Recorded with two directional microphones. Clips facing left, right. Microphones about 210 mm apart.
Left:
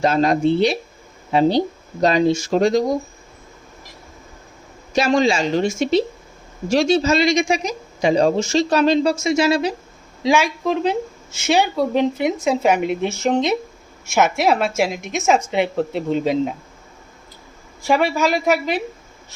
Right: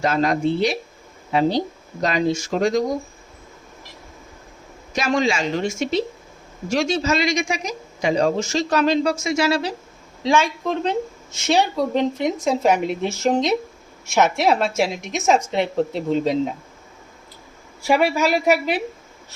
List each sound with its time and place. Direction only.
0.0 s speech: 30° left (ahead or behind)
4.9 s speech: 30° left (ahead or behind); by 16.6 s 5° left (ahead or behind)
17.8 s speech: 5° right (ahead or behind)